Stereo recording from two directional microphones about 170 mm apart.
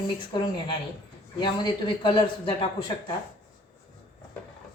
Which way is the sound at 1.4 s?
25° left (ahead or behind).